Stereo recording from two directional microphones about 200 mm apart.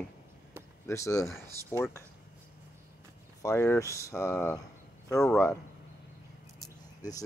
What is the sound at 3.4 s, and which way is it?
Speech, 15° left (ahead or behind).